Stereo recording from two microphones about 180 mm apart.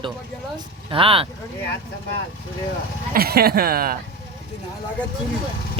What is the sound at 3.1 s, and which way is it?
Speech, 60° right (ahead or behind).